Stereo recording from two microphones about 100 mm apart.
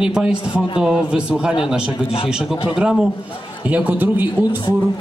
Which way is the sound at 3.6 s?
15° right (ahead or behind).